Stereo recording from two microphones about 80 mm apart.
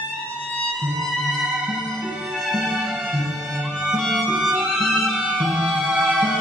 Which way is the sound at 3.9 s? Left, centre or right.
Centre.